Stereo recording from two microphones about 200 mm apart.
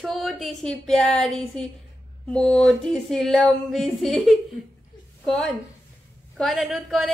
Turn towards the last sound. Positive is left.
turn(degrees=0)  # may be behind; listen again after turning